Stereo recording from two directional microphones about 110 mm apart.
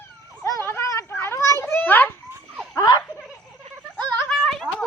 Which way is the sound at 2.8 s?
35° left (ahead or behind).